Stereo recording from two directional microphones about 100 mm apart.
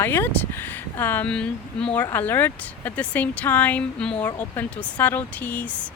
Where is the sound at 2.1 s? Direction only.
20° left (ahead or behind).